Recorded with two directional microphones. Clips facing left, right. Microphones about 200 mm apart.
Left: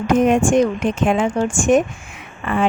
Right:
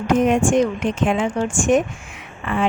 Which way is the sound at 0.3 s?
45° left (ahead or behind).